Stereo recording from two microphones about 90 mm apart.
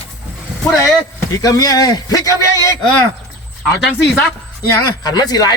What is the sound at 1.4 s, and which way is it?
A man's voice, 40° left (ahead or behind).